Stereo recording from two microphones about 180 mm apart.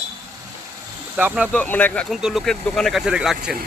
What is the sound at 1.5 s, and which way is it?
Speech, 10° left (ahead or behind).